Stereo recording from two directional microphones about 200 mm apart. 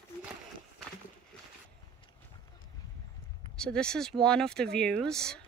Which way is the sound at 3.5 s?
5° left (ahead or behind).